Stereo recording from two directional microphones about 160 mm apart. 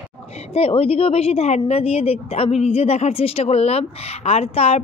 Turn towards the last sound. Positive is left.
turn(degrees=40)  # may be behind; listen again after turning